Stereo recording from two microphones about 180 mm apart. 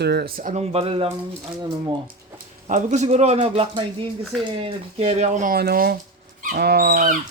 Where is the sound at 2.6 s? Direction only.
40° right (ahead or behind).